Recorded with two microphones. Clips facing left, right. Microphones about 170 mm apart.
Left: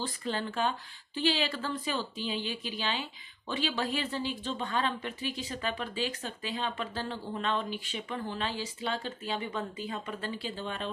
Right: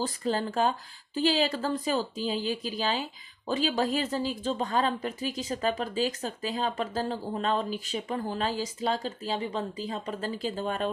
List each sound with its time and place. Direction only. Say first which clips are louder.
0.0 s speech: right 5 dB; 40° right (ahead or behind)